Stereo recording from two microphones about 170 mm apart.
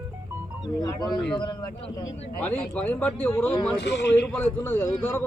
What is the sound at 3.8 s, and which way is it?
Speech, 85° left.